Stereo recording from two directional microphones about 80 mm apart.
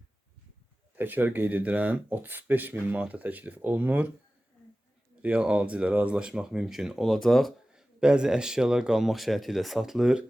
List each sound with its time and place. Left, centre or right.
0.9 s speech: right
5.2 s speech: centre
7.7 s speech: centre